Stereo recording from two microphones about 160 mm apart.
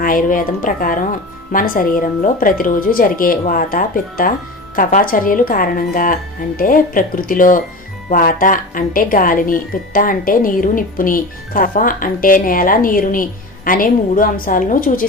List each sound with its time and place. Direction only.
0.0 s speech: 60° left (ahead or behind)